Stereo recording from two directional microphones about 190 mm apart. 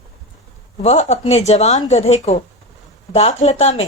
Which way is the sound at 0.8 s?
35° left (ahead or behind).